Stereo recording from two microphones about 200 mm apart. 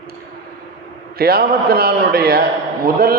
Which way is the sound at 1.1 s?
50° right (ahead or behind).